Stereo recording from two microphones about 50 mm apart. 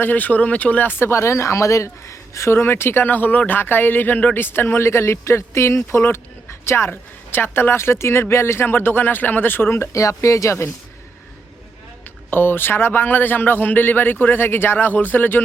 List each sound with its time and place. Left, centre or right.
0.0 s speech: left
1.0 s speech: left
9.9 s speech: left
12.3 s speech: left